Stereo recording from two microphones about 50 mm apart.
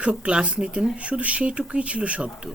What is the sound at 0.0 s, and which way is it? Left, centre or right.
Speech, right.